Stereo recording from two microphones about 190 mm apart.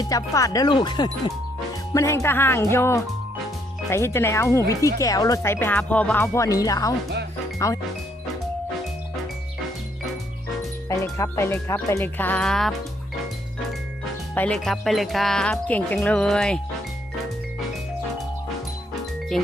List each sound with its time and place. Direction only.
0.0 s speech: 20° left (ahead or behind)
10.8 s speech: 15° left (ahead or behind)
14.3 s speech: 5° left (ahead or behind)
19.3 s speech: centre (ahead or behind)